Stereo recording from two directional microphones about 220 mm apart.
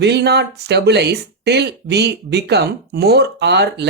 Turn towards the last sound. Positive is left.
turn(degrees=-50)  # may be behind; listen again after turning